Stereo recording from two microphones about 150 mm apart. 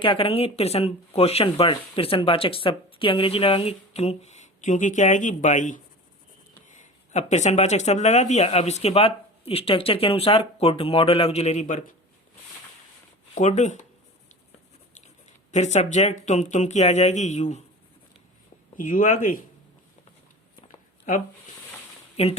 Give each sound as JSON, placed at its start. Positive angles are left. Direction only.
{"t": 0.0, "sound": "speech", "side_deg": 35}
{"t": 11.6, "sound": "speech", "side_deg": 60}
{"t": 13.3, "sound": "speech", "side_deg": 50}
{"t": 15.5, "sound": "speech", "side_deg": 50}
{"t": 18.8, "sound": "speech", "side_deg": 60}
{"t": 22.2, "sound": "speech", "side_deg": 40}